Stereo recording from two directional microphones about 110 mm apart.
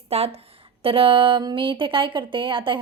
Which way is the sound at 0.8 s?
55° right (ahead or behind).